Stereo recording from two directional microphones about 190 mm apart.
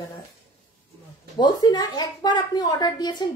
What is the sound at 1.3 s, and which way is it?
A woman's voice, 20° left (ahead or behind).